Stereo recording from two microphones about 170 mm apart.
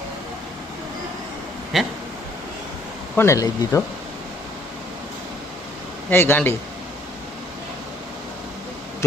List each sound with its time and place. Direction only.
1.7 s speech: centre (ahead or behind)
3.2 s speech: 15° left (ahead or behind)
6.1 s speech: 10° left (ahead or behind)